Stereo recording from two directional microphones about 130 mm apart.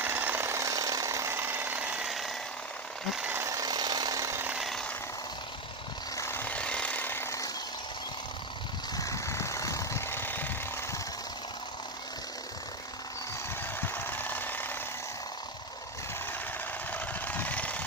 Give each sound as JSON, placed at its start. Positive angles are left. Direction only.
{"t": 0.0, "sound": "jackhammer", "side_deg": -15}
{"t": 3.2, "sound": "tools", "side_deg": -15}
{"t": 4.5, "sound": "chainsaw", "side_deg": 0}
{"t": 6.1, "sound": "a sound", "side_deg": 20}
{"t": 9.0, "sound": "vehicle", "side_deg": 25}
{"t": 13.8, "sound": "jackhammer", "side_deg": 15}
{"t": 16.9, "sound": "jackhammer", "side_deg": 15}